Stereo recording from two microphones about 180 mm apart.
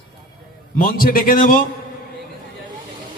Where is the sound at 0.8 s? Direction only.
55° left (ahead or behind).